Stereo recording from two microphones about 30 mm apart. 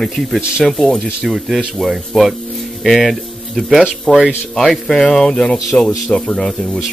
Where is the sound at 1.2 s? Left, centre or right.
Centre.